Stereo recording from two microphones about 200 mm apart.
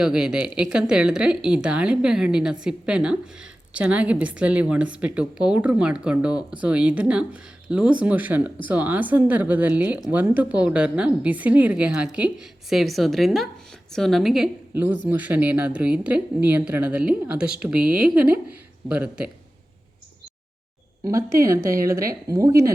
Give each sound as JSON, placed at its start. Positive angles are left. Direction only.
{"t": 0.0, "sound": "a woman's voice", "side_deg": -5}
{"t": 21.0, "sound": "speech", "side_deg": -15}
{"t": 21.6, "sound": "a woman's voice", "side_deg": -45}
{"t": 22.1, "sound": "speech", "side_deg": -15}